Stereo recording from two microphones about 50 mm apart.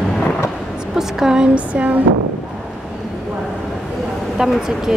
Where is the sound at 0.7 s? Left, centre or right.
Centre.